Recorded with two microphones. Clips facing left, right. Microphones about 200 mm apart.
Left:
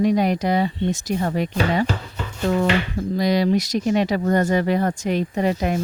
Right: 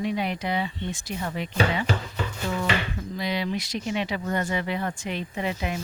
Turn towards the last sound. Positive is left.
turn(degrees=45)  # may be behind; listen again after turning